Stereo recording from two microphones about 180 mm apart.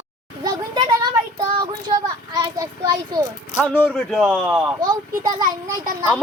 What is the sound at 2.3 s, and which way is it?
Speech, 20° right (ahead or behind).